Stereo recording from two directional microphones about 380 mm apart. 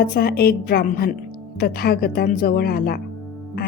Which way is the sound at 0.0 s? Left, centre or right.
Left.